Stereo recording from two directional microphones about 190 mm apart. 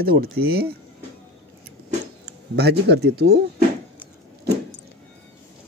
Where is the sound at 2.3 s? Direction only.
60° right (ahead or behind).